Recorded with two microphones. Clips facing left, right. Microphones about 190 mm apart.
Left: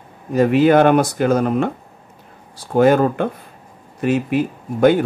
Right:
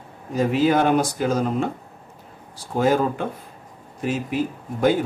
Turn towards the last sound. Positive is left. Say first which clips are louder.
# left 6 dB
turn(degrees=65)  # may be behind; listen again after turning